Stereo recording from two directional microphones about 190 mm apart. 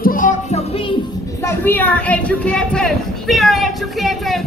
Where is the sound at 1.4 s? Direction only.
10° left (ahead or behind).